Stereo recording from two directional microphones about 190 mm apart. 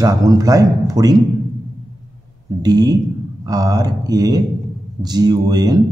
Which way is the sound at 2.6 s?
20° right (ahead or behind).